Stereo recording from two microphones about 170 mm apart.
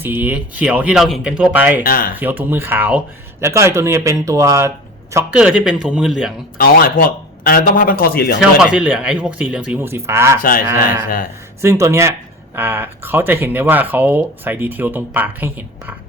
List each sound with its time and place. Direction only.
0.0 s speech: 10° right (ahead or behind)
1.8 s speech: 55° left (ahead or behind)
2.1 s speech: 10° right (ahead or behind)
5.3 s speech: 5° right (ahead or behind)
6.6 s speech: 60° left (ahead or behind)
8.4 s speech: 5° right (ahead or behind)
11.6 s speech: 15° right (ahead or behind)